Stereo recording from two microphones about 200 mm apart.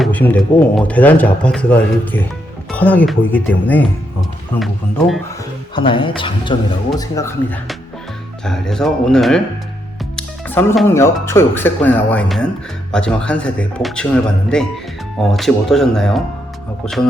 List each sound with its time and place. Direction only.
0.0 s speech: 10° left (ahead or behind)
5.7 s speech: 25° left (ahead or behind)
7.2 s speech: 15° left (ahead or behind)
10.2 s music: 10° left (ahead or behind)
10.8 s speech: 15° left (ahead or behind)